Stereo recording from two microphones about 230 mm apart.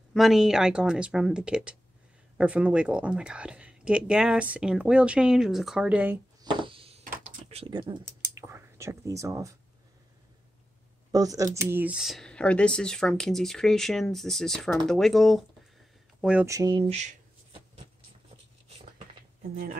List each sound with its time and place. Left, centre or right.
0.1 s speech: centre
6.4 s a sound: right
7.1 s whispering: right
11.1 s speech: centre
16.2 s shuffling cards: centre; by 17.8 s right